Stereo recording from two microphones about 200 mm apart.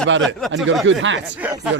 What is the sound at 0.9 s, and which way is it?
Speech, 70° right (ahead or behind).